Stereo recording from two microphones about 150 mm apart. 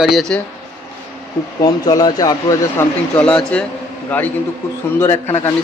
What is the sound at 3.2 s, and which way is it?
A man's voice, 5° left (ahead or behind).